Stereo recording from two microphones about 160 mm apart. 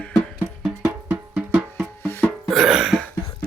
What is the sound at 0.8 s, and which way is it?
Music, 10° right (ahead or behind).